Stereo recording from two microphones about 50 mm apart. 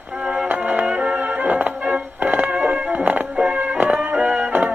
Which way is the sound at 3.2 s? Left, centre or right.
Centre.